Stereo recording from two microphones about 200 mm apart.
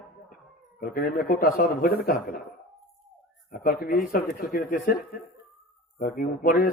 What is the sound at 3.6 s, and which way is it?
A man's voice, 45° left (ahead or behind).